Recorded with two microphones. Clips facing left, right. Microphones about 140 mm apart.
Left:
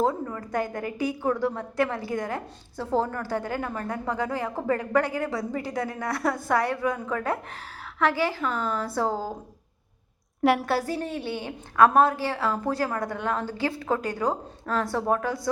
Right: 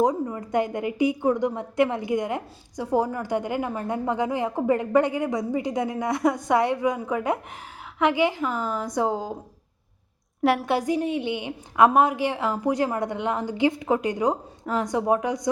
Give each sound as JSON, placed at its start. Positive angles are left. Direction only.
{"t": 0.0, "sound": "a woman's voice", "side_deg": -15}
{"t": 10.4, "sound": "a woman's voice", "side_deg": 0}
{"t": 10.7, "sound": "a woman's voice", "side_deg": -20}